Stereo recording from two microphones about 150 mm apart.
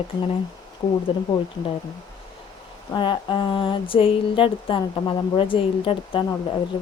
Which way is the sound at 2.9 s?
30° left (ahead or behind).